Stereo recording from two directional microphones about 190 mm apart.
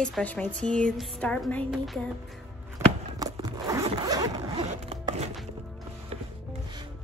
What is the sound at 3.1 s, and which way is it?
Zipper, 20° right (ahead or behind).